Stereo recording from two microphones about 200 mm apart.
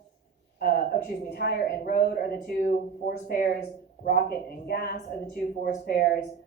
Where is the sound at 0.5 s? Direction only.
50° left (ahead or behind).